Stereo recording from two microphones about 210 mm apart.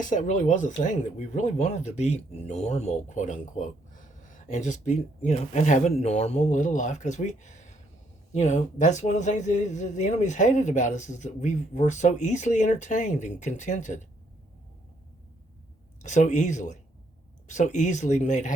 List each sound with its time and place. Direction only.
0.0 s speech: 35° left (ahead or behind)
16.0 s speech: 35° left (ahead or behind)